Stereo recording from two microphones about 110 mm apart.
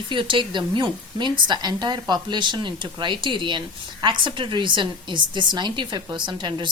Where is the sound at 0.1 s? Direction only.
50° right (ahead or behind).